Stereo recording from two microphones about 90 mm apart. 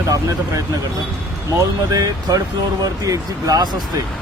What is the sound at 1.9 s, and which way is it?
Speech, 40° right (ahead or behind).